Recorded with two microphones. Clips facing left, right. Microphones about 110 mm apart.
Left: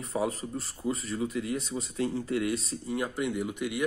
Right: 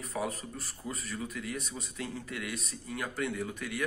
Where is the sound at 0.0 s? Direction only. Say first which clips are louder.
Left 5 dB; 25° left (ahead or behind).